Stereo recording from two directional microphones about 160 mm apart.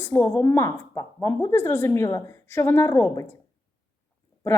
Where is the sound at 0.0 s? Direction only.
15° left (ahead or behind).